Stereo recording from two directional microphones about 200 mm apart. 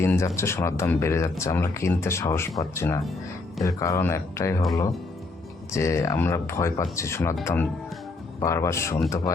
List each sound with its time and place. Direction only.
0.0 s speech: 15° left (ahead or behind)
5.7 s speech: 15° left (ahead or behind)